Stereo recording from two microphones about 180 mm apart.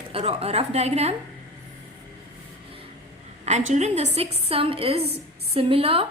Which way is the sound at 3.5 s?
40° right (ahead or behind).